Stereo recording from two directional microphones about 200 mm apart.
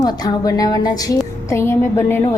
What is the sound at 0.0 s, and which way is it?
A woman's voice, 20° left (ahead or behind).